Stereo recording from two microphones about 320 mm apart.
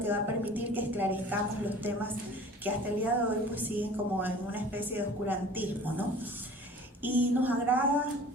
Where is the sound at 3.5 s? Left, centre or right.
Centre.